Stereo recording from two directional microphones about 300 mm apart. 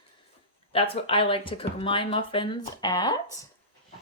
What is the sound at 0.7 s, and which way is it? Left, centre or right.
Speech, centre.